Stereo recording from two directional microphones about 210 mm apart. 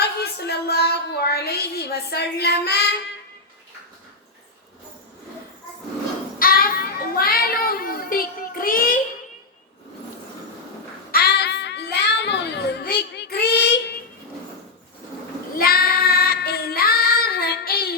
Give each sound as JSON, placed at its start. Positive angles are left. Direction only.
{"t": 0.0, "sound": "a sound", "side_deg": 50}
{"t": 6.4, "sound": "child singing", "side_deg": 45}
{"t": 11.1, "sound": "child singing", "side_deg": 50}
{"t": 15.5, "sound": "child singing", "side_deg": 45}